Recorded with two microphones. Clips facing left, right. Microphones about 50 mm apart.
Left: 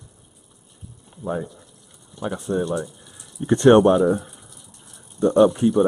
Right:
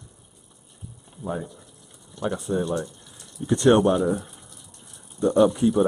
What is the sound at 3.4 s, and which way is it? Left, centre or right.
Speech, left.